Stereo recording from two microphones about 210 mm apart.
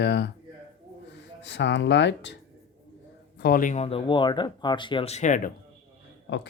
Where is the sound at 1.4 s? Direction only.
55° left (ahead or behind).